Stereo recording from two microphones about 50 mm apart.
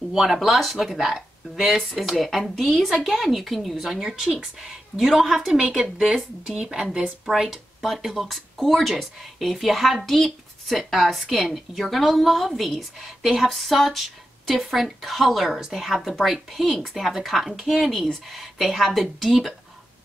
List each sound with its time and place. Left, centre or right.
0.1 s a woman's voice: centre
6.9 s speech: centre
7.3 s speech: centre